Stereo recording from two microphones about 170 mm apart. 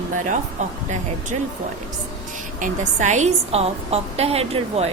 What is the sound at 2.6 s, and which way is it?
A woman's voice, 45° right (ahead or behind).